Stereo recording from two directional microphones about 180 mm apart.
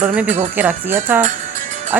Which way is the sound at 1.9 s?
10° right (ahead or behind).